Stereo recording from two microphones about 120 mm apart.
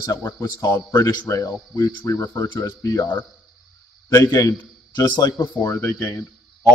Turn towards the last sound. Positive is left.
turn(degrees=20)  # may be behind; listen again after turning